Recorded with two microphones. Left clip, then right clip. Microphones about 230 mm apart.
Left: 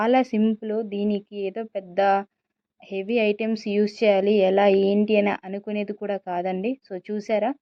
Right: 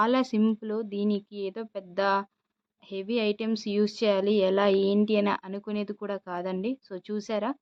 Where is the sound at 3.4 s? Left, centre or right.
Centre.